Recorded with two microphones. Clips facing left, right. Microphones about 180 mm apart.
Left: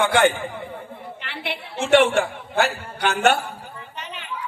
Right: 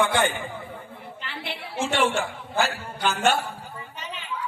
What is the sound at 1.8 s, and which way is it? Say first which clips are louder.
A man's voice: left 7 dB; 65° left (ahead or behind).